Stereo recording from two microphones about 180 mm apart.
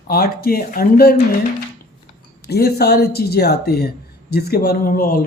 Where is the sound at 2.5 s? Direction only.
65° left (ahead or behind).